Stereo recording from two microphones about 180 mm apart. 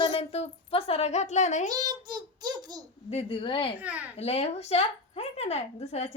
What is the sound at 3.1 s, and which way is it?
Speech, 30° left (ahead or behind).